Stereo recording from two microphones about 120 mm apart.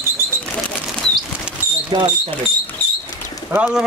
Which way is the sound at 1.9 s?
40° right (ahead or behind).